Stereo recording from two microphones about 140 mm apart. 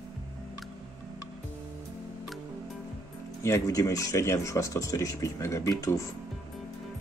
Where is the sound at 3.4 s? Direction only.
20° left (ahead or behind).